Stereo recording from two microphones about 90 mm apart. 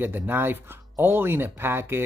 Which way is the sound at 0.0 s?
25° right (ahead or behind).